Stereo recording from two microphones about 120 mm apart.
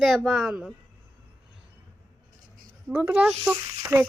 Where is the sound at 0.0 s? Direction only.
Centre (ahead or behind).